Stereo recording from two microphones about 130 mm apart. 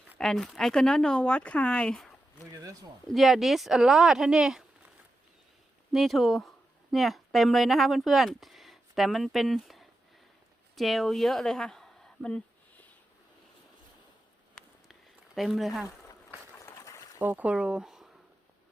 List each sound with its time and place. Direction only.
0.2 s speech: 5° left (ahead or behind)
3.1 s speech: centre (ahead or behind)
5.9 s speech: centre (ahead or behind)
15.4 s speech: centre (ahead or behind)
16.7 s boat: 25° left (ahead or behind)
17.2 s speech: 15° right (ahead or behind)